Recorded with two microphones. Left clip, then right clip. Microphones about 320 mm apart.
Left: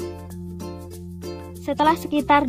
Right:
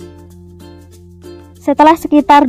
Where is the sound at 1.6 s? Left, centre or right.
Right.